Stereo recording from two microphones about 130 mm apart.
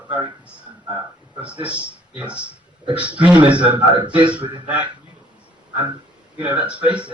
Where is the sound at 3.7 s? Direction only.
40° right (ahead or behind).